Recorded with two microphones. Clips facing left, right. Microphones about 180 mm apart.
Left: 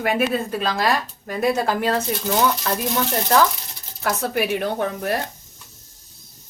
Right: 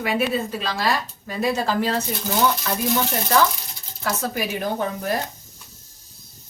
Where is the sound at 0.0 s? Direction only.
50° left (ahead or behind).